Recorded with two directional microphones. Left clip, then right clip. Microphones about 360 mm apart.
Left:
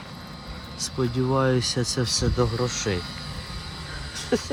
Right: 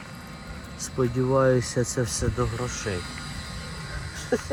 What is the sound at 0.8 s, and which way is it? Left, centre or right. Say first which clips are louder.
Speech: even; centre.